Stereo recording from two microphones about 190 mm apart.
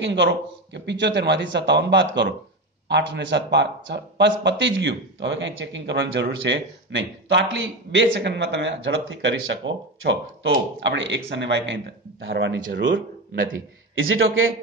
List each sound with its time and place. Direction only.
0.0 s a man's voice: 70° right (ahead or behind)
13.9 s a man's voice: 90° right